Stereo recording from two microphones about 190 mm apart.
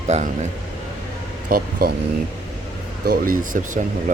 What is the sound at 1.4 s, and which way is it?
Speech, 50° right (ahead or behind).